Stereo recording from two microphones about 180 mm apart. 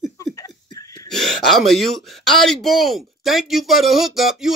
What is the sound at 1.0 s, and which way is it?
Speech, centre (ahead or behind).